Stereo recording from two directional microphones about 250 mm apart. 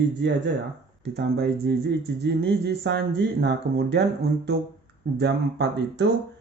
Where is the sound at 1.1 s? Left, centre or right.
Right.